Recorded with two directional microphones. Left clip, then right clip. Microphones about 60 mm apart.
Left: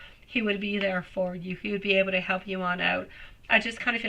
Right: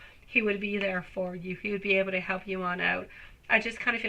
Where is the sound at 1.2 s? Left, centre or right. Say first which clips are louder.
Left 6 dB; right.